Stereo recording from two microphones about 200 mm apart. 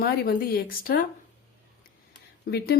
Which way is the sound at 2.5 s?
55° left (ahead or behind).